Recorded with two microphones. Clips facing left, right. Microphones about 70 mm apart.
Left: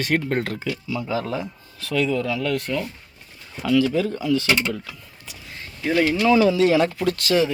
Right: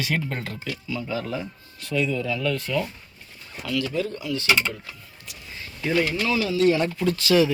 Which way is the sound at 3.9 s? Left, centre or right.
Left.